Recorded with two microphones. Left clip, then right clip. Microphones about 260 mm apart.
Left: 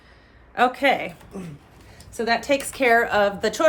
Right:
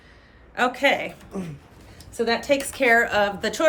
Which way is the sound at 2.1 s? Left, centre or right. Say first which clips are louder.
Even; left.